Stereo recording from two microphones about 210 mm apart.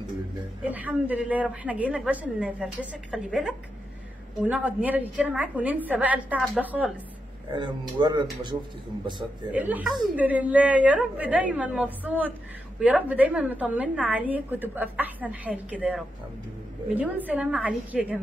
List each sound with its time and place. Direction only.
0.7 s a woman's voice: 10° right (ahead or behind)
7.5 s speech: 20° right (ahead or behind)
9.5 s a woman's voice: 10° right (ahead or behind)
16.9 s a woman's voice: 5° right (ahead or behind)